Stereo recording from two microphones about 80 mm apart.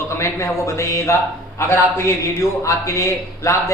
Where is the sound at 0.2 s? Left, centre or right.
Left.